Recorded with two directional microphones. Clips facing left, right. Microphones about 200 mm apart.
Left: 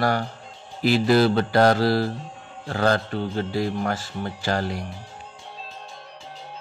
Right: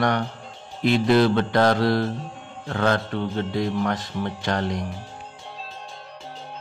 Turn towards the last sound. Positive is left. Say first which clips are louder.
# even
turn(degrees=5)  # may be behind; listen again after turning